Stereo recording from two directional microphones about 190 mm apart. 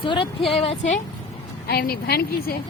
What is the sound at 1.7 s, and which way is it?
Speech, 55° left (ahead or behind).